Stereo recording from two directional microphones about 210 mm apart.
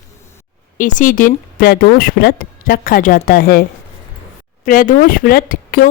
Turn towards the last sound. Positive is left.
turn(degrees=45)  # may be behind; listen again after turning